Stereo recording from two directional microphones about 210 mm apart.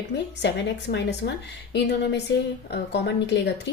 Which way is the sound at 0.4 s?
55° left (ahead or behind).